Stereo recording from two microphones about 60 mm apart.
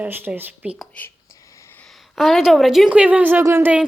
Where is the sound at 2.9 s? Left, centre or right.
Right.